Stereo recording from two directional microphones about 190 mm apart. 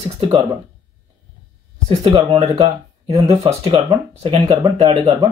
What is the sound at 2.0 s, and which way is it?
Speech, 35° right (ahead or behind).